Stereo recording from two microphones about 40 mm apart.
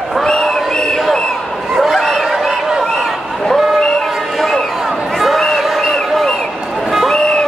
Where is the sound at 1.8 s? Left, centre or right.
Centre.